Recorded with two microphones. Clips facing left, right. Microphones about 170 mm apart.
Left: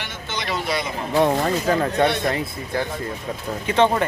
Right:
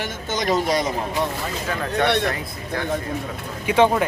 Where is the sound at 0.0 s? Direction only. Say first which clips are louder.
Right 5 dB; 45° right (ahead or behind).